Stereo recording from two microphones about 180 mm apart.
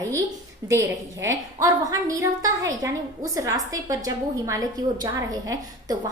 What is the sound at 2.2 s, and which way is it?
A woman's voice, 20° right (ahead or behind).